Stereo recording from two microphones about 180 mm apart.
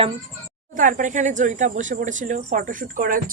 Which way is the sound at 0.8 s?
45° right (ahead or behind).